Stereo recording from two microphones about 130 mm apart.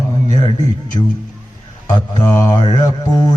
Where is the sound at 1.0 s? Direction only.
35° left (ahead or behind).